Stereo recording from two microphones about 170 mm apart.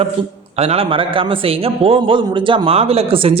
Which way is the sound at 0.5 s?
35° right (ahead or behind).